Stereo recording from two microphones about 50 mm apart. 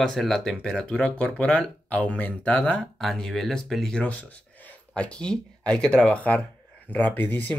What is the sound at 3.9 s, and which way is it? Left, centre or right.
Speech, left.